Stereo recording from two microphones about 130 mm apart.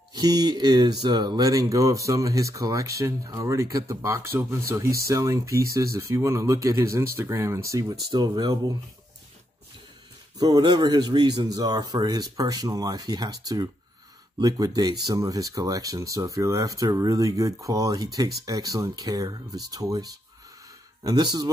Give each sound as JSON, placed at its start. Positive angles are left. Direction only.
{"t": 0.1, "sound": "speech", "side_deg": -30}
{"t": 10.4, "sound": "speech", "side_deg": -30}